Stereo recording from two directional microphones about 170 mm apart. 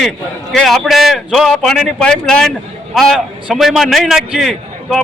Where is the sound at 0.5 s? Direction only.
Centre (ahead or behind).